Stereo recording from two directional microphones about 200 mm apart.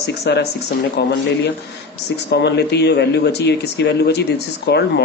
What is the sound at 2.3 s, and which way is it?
Speech, 55° left (ahead or behind).